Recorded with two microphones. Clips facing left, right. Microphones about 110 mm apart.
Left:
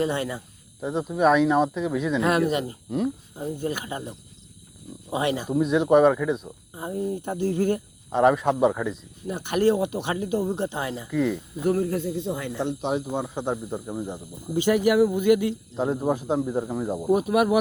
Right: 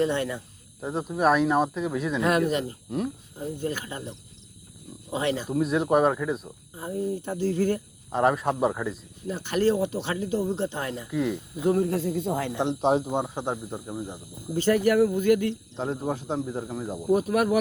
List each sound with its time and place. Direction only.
0.0 s speech: 5° left (ahead or behind)
0.8 s speech: 5° right (ahead or behind); by 5.5 s 15° left (ahead or behind)
5.5 s speech: centre (ahead or behind)
6.7 s speech: 20° left (ahead or behind)
8.1 s speech: centre (ahead or behind)
9.5 s speech: 15° left (ahead or behind)
11.1 s speech: 10° right (ahead or behind)
11.6 s speech: 25° right (ahead or behind)
12.0 s speech: 45° right (ahead or behind)
13.1 s speech: 20° right (ahead or behind)
13.3 s speech: 10° right (ahead or behind)
13.9 s speech: 10° left (ahead or behind)
17.2 s speech: 10° left (ahead or behind)